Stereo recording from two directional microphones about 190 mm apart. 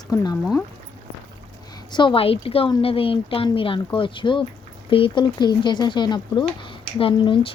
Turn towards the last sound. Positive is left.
turn(degrees=25)  # may be behind; listen again after turning